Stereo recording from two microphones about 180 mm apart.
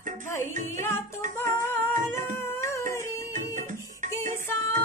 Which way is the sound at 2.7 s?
15° left (ahead or behind).